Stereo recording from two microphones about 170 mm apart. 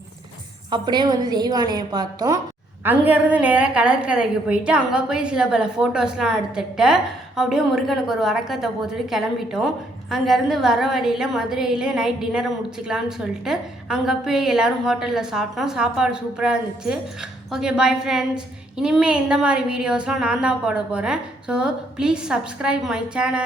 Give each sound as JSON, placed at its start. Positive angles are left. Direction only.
{"t": 0.7, "sound": "a woman's voice", "side_deg": -25}
{"t": 2.8, "sound": "a woman's voice", "side_deg": -10}